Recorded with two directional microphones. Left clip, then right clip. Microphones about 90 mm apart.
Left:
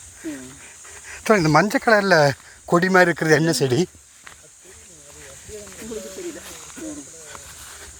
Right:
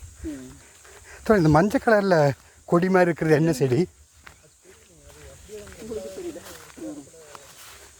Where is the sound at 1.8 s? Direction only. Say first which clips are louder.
Left 5 dB; 20° right (ahead or behind).